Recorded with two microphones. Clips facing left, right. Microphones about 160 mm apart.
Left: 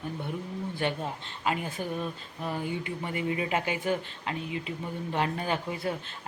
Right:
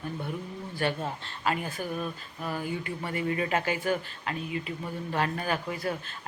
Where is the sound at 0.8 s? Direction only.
20° left (ahead or behind).